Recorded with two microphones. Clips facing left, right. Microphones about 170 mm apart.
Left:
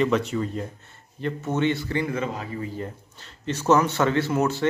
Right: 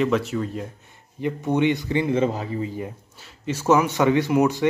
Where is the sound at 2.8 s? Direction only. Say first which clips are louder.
Right 1 dB; 10° right (ahead or behind).